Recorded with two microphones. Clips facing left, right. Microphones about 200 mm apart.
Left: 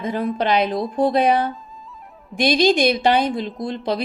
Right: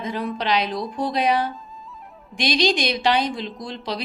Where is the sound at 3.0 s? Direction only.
50° left (ahead or behind).